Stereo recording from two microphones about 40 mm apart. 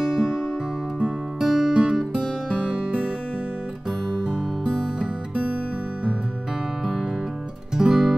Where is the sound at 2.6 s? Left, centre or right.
Right.